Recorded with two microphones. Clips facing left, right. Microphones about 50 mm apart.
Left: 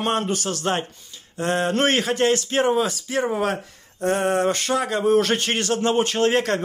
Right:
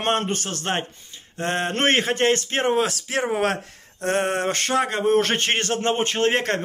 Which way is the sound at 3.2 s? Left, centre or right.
Right.